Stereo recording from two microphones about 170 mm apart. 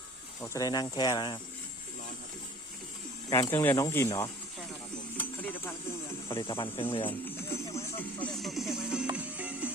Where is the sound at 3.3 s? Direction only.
20° left (ahead or behind).